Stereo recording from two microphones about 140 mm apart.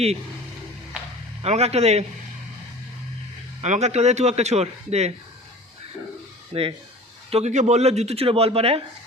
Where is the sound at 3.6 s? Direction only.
55° right (ahead or behind).